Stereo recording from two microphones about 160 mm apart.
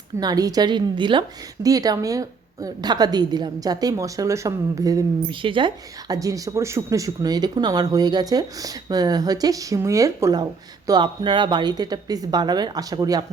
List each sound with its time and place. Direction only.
0.2 s speech: 25° right (ahead or behind)